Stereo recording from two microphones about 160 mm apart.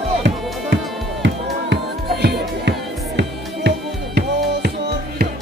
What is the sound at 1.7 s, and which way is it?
Music, 90° right.